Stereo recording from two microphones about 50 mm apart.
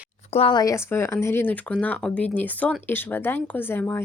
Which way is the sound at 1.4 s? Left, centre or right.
Left.